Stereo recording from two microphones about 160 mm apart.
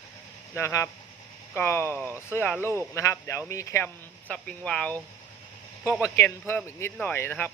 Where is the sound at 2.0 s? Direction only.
15° right (ahead or behind).